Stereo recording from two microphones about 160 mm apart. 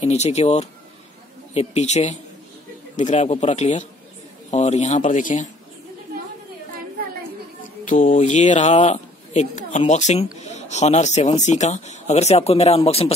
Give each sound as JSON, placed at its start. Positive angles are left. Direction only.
{"t": 0.0, "sound": "speech", "side_deg": 40}
{"t": 7.8, "sound": "speech", "side_deg": 55}